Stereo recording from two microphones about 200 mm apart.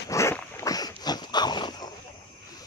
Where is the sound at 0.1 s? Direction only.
15° left (ahead or behind).